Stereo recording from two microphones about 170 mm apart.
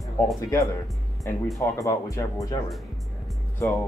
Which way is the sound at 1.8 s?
20° left (ahead or behind).